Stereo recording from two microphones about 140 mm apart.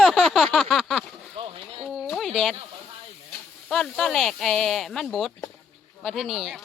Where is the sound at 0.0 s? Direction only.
Centre (ahead or behind).